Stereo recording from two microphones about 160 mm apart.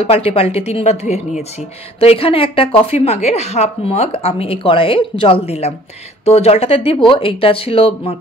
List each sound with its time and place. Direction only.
0.0 s speech: 35° left (ahead or behind)